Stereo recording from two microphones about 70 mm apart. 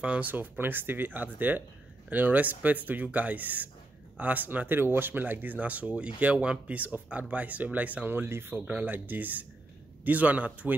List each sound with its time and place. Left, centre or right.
0.0 s speech: right